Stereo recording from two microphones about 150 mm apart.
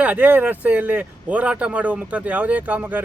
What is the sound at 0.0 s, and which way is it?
A man's voice, 10° right (ahead or behind).